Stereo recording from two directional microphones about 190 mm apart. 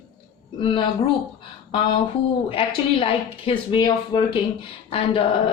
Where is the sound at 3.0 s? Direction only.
25° left (ahead or behind).